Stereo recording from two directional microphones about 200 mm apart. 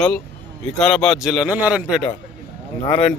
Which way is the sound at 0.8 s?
Centre (ahead or behind).